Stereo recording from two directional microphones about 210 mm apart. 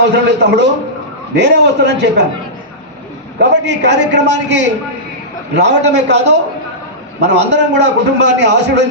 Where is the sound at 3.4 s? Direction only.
55° right (ahead or behind).